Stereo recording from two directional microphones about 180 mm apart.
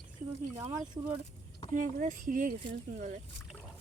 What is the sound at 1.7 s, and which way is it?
Speech, 45° right (ahead or behind).